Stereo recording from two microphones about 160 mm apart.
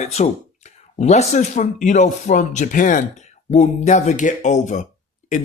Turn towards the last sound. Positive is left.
turn(degrees=50)  # may be behind; listen again after turning